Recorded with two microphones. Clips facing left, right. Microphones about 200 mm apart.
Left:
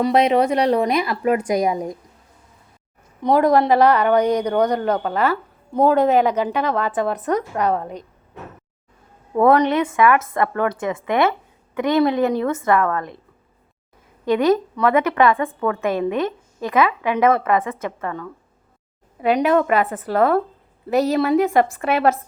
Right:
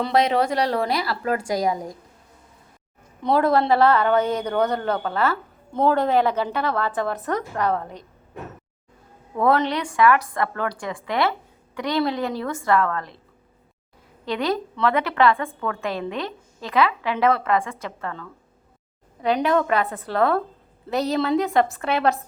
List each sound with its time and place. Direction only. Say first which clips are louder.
0.0 s a woman's voice: left 4 dB; 20° left (ahead or behind)
3.2 s a woman's voice: left 4 dB; 15° left (ahead or behind)
9.5 s a woman's voice: left 4 dB; 15° left (ahead or behind)
14.3 s a woman's voice: left 7 dB; 15° left (ahead or behind)